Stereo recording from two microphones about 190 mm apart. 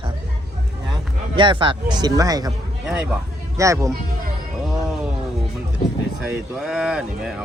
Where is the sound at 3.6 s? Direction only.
15° right (ahead or behind).